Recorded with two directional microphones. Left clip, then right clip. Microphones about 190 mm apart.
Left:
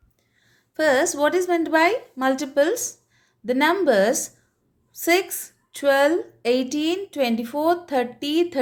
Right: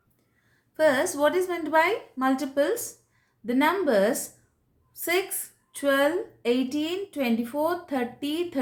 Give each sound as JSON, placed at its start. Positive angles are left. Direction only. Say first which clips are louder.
{"t": 0.7, "sound": "a woman's voice", "louder": "left 3 dB", "side_deg": 50}